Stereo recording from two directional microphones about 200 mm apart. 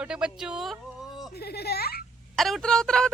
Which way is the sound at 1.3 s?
50° left (ahead or behind).